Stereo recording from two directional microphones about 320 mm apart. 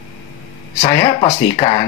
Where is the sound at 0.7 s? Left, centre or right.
Centre.